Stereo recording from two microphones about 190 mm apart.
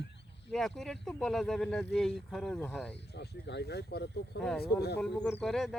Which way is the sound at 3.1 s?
65° left (ahead or behind).